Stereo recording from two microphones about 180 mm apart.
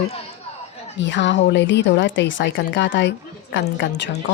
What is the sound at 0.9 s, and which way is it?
Speech, 85° left.